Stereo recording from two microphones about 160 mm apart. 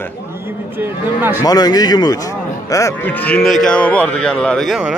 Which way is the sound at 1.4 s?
25° left (ahead or behind).